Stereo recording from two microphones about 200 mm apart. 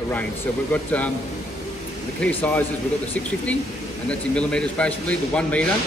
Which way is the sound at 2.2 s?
5° left (ahead or behind).